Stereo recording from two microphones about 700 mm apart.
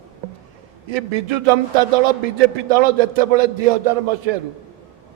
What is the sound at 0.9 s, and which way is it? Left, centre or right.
A man's voice, right.